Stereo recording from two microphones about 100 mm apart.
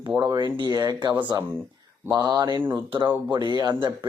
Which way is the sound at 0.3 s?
50° right (ahead or behind).